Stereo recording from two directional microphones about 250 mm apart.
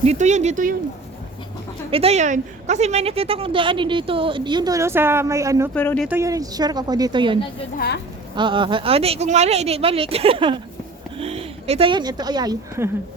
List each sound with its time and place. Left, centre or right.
0.0 s a woman's voice: right
1.9 s a woman's voice: right
5.7 s speech: centre
6.1 s speech: centre
8.4 s a woman's voice: centre